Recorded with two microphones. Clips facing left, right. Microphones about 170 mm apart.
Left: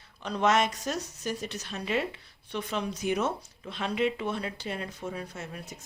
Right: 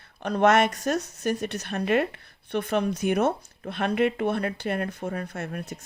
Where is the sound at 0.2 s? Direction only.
55° right (ahead or behind).